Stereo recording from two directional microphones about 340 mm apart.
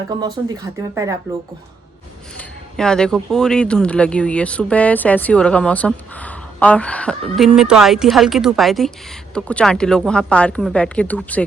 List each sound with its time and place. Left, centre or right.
0.4 s speech: centre
2.4 s speech: centre